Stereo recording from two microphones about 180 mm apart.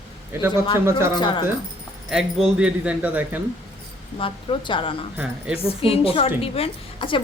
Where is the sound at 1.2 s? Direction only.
25° left (ahead or behind).